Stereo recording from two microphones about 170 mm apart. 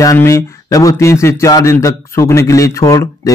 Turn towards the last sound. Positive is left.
turn(degrees=20)  # may be behind; listen again after turning